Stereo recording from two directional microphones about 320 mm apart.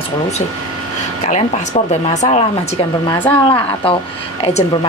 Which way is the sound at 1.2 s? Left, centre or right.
Left.